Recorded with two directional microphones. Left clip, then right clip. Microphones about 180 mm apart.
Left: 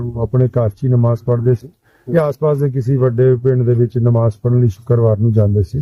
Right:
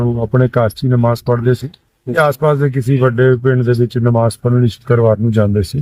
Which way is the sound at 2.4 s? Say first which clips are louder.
Right 2 dB; 20° left (ahead or behind).